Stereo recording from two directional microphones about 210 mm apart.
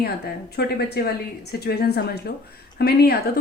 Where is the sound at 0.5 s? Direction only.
50° left (ahead or behind).